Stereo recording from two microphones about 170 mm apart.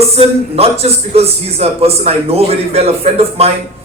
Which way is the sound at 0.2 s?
35° right (ahead or behind).